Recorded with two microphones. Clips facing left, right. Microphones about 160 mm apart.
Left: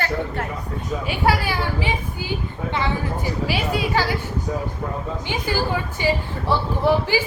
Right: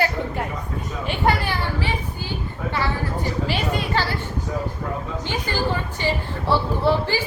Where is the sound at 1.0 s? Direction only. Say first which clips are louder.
Even; 5° left (ahead or behind).